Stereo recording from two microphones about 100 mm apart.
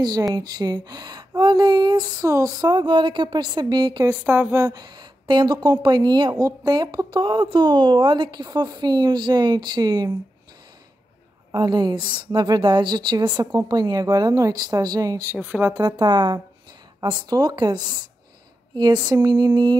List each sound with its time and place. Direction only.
0.0 s speech: 40° right (ahead or behind)
2.2 s speech: 35° right (ahead or behind)
2.6 s speech: 50° right (ahead or behind)
4.4 s speech: 25° right (ahead or behind)
4.6 s speech: 40° right (ahead or behind)
11.5 s speech: 45° right (ahead or behind)
15.3 s a woman's voice: 15° right (ahead or behind)
15.7 s speech: 45° right (ahead or behind)